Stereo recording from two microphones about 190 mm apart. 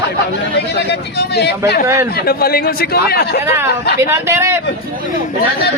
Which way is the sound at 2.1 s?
55° left (ahead or behind).